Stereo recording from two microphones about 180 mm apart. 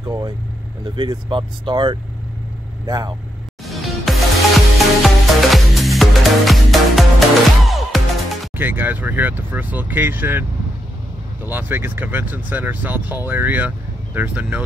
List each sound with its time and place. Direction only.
0.0 s speech: 20° right (ahead or behind)
3.6 s music: centre (ahead or behind)
8.5 s speech: 10° right (ahead or behind)
11.4 s speech: 10° right (ahead or behind)